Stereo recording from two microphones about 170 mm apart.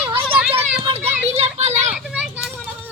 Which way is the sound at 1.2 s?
40° right (ahead or behind).